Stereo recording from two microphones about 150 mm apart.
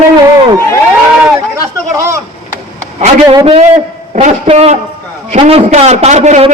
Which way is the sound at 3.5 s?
45° right (ahead or behind).